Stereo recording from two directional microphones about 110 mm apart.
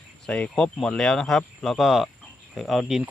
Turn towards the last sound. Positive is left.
turn(degrees=0)  # may be behind; listen again after turning